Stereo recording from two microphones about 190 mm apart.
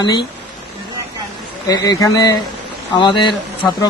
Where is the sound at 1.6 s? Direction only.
20° left (ahead or behind).